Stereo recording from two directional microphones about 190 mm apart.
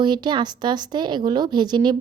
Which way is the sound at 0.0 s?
25° right (ahead or behind).